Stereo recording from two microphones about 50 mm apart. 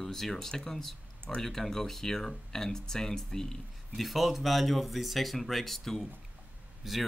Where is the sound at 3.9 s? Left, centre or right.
Centre.